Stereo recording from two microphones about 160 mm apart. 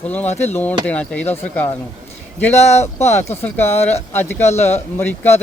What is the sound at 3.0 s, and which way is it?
Speech, 15° left (ahead or behind).